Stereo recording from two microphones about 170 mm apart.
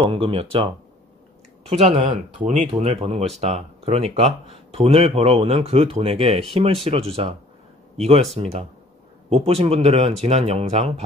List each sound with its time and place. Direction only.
0.1 s speech: 35° right (ahead or behind)
1.7 s speech: 40° right (ahead or behind)